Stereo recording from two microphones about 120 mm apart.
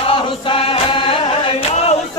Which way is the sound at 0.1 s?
50° left (ahead or behind).